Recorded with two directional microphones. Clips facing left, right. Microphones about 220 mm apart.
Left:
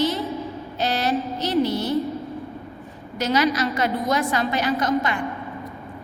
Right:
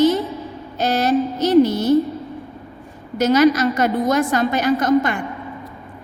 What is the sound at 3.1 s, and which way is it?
A woman's voice, 45° right (ahead or behind).